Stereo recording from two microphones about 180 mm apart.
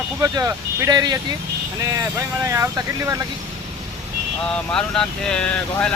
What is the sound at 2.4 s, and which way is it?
Speech, 15° right (ahead or behind).